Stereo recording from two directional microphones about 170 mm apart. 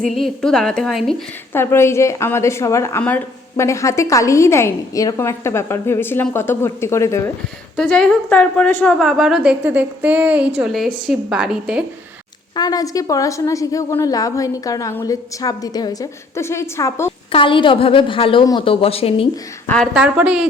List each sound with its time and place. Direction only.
0.1 s a woman's voice: centre (ahead or behind)
1.5 s a woman's voice: 15° left (ahead or behind)
7.8 s a woman's voice: 5° left (ahead or behind)
12.5 s a woman's voice: 20° left (ahead or behind)
17.3 s a woman's voice: 30° left (ahead or behind)
19.6 s a woman's voice: 5° left (ahead or behind)